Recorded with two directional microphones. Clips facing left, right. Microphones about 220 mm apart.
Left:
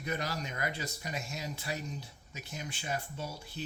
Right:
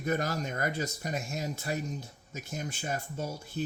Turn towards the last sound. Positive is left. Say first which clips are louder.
# right 6 dB
turn(degrees=-45)  # may be behind; listen again after turning